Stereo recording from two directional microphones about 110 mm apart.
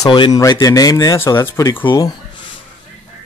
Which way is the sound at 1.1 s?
25° left (ahead or behind).